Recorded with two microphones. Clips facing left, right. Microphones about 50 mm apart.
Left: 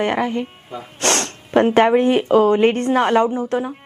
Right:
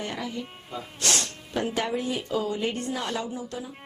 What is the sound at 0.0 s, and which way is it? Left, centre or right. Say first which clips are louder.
Speech: left 13 dB; left.